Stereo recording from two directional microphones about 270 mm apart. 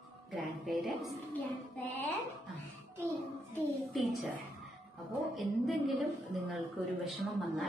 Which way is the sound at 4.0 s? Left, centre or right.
Centre.